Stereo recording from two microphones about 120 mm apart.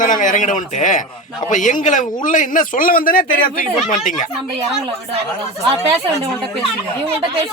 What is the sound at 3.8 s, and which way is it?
Speech, 90° left.